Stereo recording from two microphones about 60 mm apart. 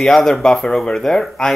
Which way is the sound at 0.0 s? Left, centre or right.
Centre.